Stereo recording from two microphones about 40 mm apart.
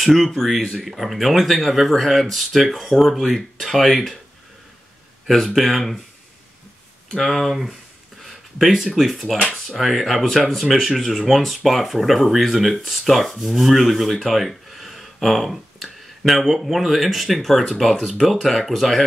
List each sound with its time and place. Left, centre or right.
0.0 s speech: centre
5.2 s speech: centre
7.2 s speech: centre